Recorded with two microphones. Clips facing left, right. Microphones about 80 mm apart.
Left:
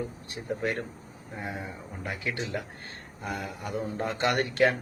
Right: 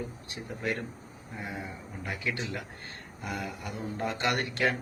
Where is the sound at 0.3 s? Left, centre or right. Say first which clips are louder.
Left 3 dB; left.